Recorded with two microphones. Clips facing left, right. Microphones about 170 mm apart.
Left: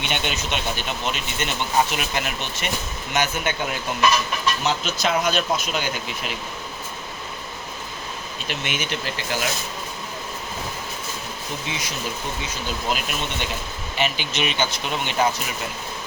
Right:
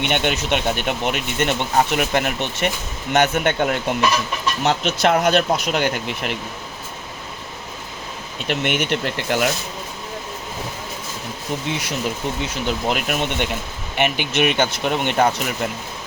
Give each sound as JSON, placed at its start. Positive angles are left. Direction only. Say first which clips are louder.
{"t": 0.0, "sound": "speech", "louder": "right 6 dB", "side_deg": -60}
{"t": 8.4, "sound": "speech", "louder": "right 8 dB", "side_deg": -65}
{"t": 11.7, "sound": "speech", "louder": "right 5 dB", "side_deg": -60}